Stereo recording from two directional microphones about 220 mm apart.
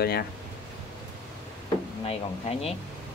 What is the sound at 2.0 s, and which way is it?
Speech, 25° left (ahead or behind).